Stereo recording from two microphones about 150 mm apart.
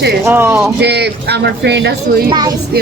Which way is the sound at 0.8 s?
90° right.